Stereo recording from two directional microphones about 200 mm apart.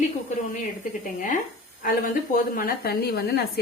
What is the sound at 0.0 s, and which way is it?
A woman's voice, 40° left (ahead or behind).